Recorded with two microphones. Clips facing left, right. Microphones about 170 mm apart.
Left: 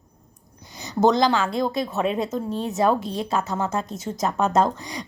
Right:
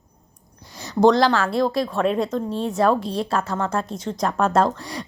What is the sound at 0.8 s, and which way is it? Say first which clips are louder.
A woman's voice: right 3 dB; centre (ahead or behind).